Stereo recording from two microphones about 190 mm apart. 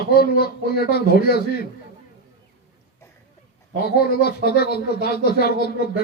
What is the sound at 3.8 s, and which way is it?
Speech, 55° left (ahead or behind).